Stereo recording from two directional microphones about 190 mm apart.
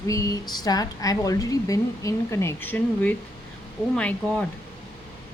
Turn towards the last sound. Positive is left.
turn(degrees=5)  # may be behind; listen again after turning